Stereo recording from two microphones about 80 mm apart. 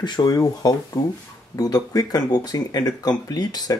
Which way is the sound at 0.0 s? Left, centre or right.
Left.